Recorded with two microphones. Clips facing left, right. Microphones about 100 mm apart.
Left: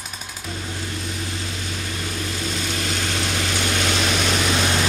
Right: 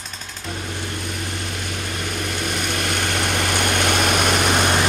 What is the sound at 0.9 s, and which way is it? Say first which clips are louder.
Vehicle: right 1 dB; 55° right (ahead or behind).